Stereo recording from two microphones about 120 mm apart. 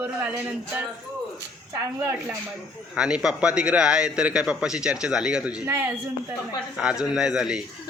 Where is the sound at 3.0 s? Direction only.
5° right (ahead or behind).